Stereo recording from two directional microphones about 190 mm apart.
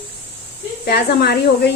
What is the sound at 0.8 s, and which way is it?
Speech, 55° left (ahead or behind).